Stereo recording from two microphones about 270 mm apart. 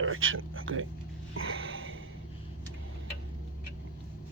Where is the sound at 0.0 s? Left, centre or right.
Right.